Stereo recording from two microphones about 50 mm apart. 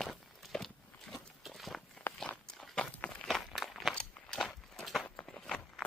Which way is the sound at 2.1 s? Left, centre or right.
Left.